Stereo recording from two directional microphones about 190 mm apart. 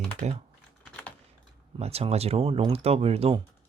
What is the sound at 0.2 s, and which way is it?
Speech, 35° right (ahead or behind).